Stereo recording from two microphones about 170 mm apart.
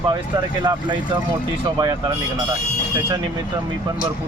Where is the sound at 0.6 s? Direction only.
25° right (ahead or behind).